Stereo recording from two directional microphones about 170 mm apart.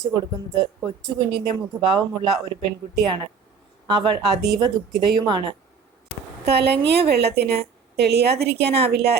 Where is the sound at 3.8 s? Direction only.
25° right (ahead or behind).